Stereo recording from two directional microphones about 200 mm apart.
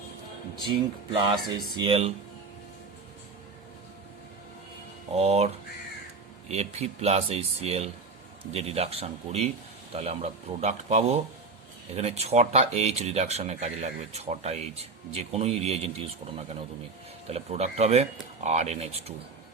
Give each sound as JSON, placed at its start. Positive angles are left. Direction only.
{"t": 1.2, "sound": "speech", "side_deg": -20}
{"t": 5.1, "sound": "speech", "side_deg": -30}
{"t": 17.2, "sound": "speech", "side_deg": -30}